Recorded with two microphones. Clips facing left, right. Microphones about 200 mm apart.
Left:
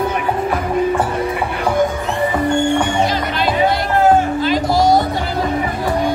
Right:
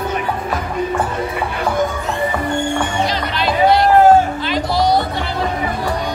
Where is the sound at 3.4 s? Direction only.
50° left (ahead or behind).